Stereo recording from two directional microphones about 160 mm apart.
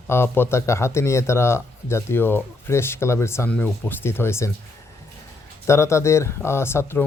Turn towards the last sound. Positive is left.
turn(degrees=15)  # may be behind; listen again after turning